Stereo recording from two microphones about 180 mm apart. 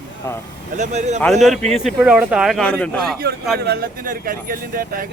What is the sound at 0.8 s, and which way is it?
Speech, 40° right (ahead or behind).